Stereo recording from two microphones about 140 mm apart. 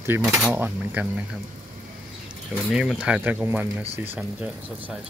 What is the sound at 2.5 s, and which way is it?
Speech, 5° right (ahead or behind).